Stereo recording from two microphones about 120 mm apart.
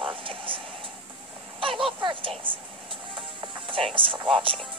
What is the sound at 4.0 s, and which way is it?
Speech, 45° right (ahead or behind).